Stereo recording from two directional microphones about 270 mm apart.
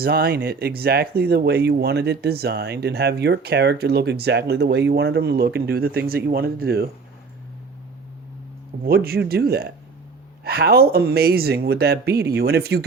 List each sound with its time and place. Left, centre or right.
0.0 s speech: right
8.8 s speech: right